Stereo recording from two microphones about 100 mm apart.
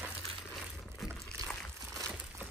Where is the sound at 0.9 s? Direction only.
5° left (ahead or behind).